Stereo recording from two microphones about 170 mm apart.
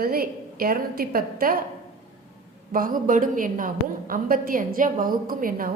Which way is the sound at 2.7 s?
55° right (ahead or behind).